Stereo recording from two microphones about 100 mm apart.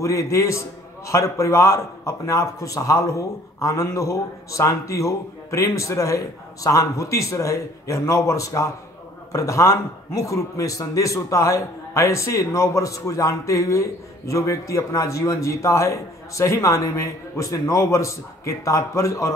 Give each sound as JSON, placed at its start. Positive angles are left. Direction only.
{"t": 0.0, "sound": "a man's voice", "side_deg": 30}